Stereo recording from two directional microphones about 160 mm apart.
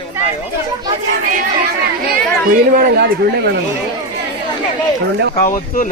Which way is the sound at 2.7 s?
65° right (ahead or behind).